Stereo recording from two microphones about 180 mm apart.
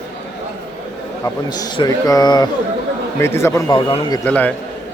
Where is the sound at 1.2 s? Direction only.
20° left (ahead or behind).